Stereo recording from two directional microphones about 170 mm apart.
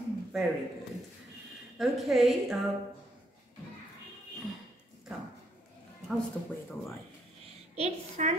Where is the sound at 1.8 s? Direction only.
Centre (ahead or behind).